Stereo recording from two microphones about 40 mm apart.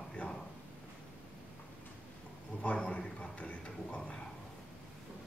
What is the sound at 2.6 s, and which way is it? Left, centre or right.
A man's voice, left.